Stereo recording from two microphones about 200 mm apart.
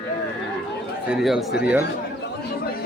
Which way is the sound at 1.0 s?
5° right (ahead or behind).